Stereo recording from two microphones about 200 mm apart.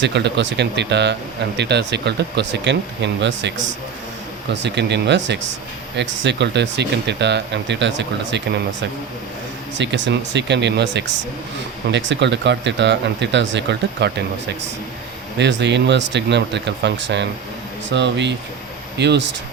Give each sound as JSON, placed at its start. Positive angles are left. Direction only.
{"t": 0.0, "sound": "speech", "side_deg": -60}
{"t": 9.7, "sound": "speech", "side_deg": -65}
{"t": 15.4, "sound": "speech", "side_deg": -60}